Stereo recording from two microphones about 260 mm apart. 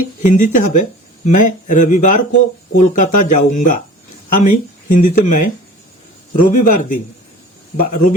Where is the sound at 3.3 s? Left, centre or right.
Left.